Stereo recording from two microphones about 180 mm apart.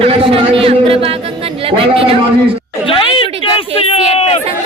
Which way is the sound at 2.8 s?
30° left (ahead or behind).